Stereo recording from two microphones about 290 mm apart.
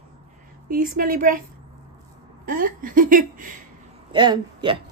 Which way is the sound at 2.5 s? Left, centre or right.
Right.